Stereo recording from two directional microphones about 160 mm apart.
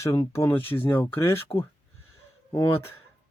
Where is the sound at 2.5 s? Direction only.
15° left (ahead or behind).